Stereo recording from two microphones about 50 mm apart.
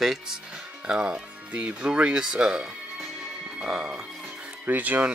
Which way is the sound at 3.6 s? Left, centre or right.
Centre.